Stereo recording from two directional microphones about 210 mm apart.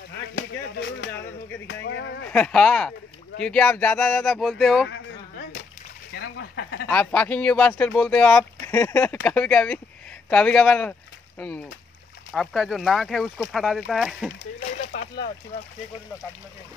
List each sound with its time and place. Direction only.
0.4 s speech: 55° left (ahead or behind)
1.7 s music: 55° left (ahead or behind)
2.2 s speech: 5° left (ahead or behind)
6.1 s a sound: 60° left (ahead or behind)
6.9 s speech: 5° left (ahead or behind)